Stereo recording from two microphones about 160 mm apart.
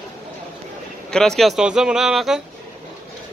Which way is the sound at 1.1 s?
5° left (ahead or behind).